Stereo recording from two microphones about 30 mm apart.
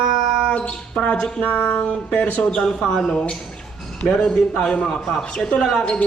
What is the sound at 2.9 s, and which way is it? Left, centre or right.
Speech, centre.